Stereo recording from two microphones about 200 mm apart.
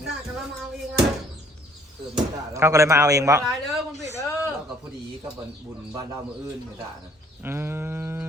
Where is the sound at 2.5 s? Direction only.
15° right (ahead or behind).